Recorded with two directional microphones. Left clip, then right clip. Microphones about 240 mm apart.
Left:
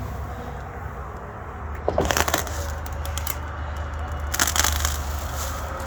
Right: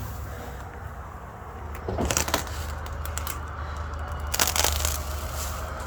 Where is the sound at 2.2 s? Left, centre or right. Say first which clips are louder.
Left 5 dB; centre.